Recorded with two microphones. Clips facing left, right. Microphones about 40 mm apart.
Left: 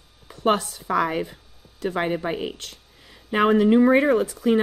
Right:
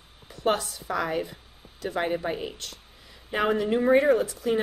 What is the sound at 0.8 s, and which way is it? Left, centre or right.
A woman's voice, left.